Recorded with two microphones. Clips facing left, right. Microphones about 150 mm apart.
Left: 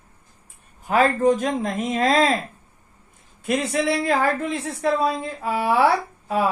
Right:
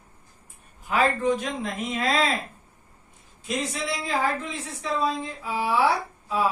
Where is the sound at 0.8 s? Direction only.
45° left (ahead or behind).